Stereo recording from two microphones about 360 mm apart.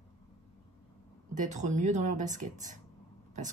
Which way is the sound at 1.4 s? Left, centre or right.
Centre.